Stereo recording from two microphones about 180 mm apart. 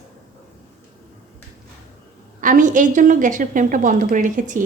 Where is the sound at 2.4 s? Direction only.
45° right (ahead or behind).